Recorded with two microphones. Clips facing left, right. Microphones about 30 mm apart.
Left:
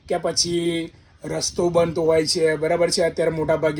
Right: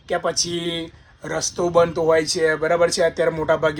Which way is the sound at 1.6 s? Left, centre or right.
Centre.